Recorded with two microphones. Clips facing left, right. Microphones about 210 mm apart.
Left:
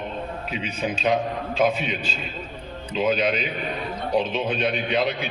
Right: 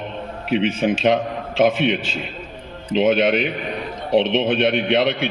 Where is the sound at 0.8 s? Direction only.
65° right (ahead or behind).